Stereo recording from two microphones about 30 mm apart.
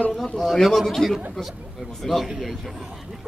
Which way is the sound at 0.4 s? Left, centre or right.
Centre.